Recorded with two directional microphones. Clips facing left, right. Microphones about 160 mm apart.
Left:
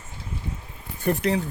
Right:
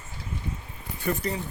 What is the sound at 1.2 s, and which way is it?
Speech, 80° left.